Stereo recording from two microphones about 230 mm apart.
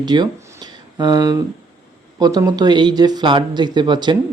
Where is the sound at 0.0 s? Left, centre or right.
Centre.